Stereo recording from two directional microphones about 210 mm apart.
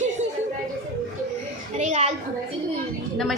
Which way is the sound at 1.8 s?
30° right (ahead or behind).